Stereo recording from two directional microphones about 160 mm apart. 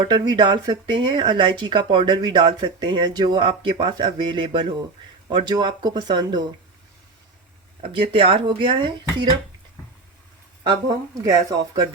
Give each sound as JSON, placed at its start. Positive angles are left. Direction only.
{"t": 0.1, "sound": "speech", "side_deg": -25}
{"t": 7.8, "sound": "speech", "side_deg": -35}
{"t": 10.6, "sound": "speech", "side_deg": -25}